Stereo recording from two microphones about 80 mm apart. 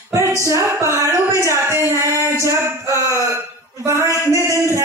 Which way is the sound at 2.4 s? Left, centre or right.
Right.